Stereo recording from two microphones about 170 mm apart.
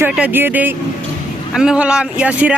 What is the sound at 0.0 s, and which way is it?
A man's voice, 10° right (ahead or behind).